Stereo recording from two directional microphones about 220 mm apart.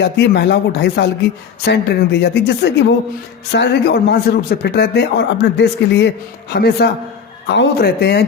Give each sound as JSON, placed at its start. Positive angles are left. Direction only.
{"t": 0.0, "sound": "a man's voice", "side_deg": 50}